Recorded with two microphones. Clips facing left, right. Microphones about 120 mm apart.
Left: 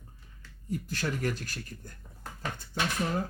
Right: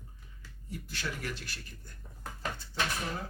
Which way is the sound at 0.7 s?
45° left (ahead or behind).